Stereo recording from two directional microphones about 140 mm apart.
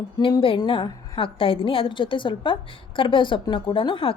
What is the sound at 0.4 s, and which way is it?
A woman's voice, 35° left (ahead or behind).